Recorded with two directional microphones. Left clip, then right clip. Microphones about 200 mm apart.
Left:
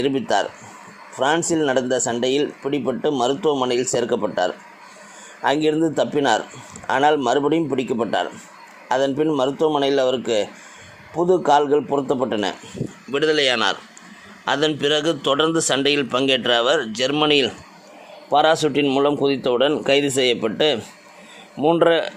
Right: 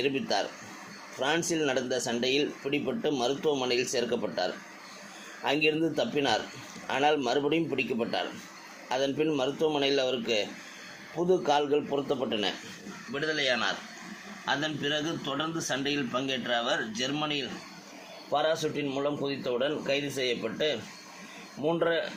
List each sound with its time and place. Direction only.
0.0 s speech: 35° left (ahead or behind)
13.1 s a man's voice: 60° left (ahead or behind)
18.3 s speech: 50° left (ahead or behind)